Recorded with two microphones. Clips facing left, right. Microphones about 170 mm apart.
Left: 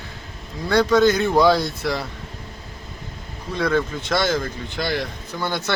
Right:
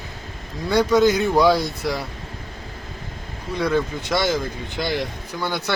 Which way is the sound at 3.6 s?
15° right (ahead or behind).